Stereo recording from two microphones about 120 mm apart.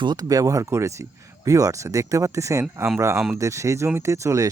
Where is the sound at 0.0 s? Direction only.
35° right (ahead or behind).